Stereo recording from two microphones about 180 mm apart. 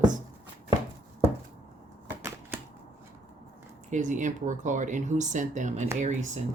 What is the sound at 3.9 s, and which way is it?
Speech, 45° right (ahead or behind).